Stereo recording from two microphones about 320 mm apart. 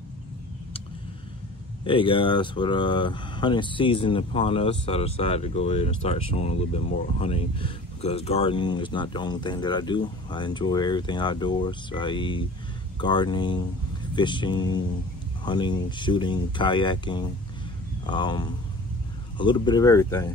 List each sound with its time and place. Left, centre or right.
1.9 s speech: centre